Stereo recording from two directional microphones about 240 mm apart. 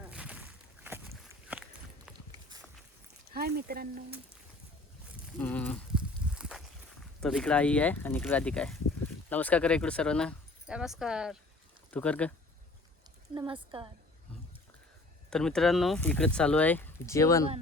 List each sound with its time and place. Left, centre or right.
0.1 s a sound: centre
3.2 s speech: right
5.4 s livestock: centre
7.2 s speech: centre
13.3 s speech: centre
15.3 s speech: centre